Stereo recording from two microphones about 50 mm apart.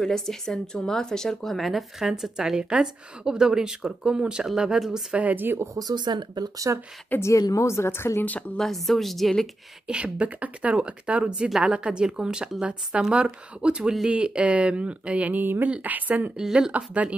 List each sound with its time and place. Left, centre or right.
0.0 s speech: centre
5.1 s speech: right
6.7 s speech: right
7.2 s a woman's voice: left
8.5 s a woman's voice: centre
9.8 s speech: right
11.6 s speech: right
15.3 s speech: right
16.3 s speech: centre
16.7 s speech: right